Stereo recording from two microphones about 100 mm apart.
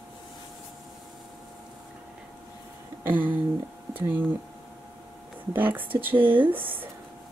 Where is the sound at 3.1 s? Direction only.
20° right (ahead or behind).